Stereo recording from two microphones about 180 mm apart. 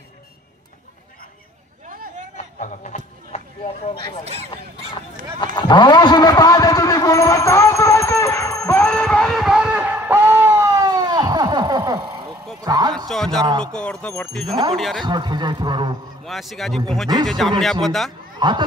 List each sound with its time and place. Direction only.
1.9 s a sound: 45° right (ahead or behind)
2.3 s a sound: 40° left (ahead or behind)
3.3 s chop: 40° left (ahead or behind)
4.2 s speech: 35° right (ahead or behind)
5.4 s a man's voice: 25° left (ahead or behind)
8.8 s a sound: 5° left (ahead or behind); by 12.1 s 20° right (ahead or behind)
12.6 s speech: 20° right (ahead or behind)
13.1 s speech: 5° left (ahead or behind)
14.5 s speech: 30° right (ahead or behind)
14.8 s speech: centre (ahead or behind)
15.0 s speech: 25° right (ahead or behind)
16.3 s speech: centre (ahead or behind)
18.4 s speech: 25° right (ahead or behind)